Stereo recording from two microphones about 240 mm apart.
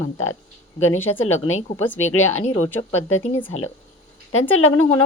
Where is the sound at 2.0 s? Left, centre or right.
Left.